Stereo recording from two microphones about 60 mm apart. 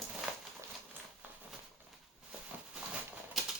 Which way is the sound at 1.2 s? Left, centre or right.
Right.